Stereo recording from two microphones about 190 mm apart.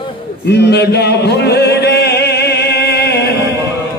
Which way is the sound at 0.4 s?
60° left (ahead or behind).